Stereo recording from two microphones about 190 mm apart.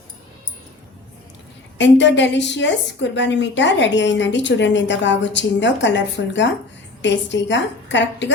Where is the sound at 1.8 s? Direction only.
70° left (ahead or behind).